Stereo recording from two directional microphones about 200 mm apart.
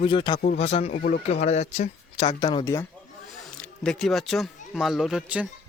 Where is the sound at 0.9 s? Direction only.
45° left (ahead or behind).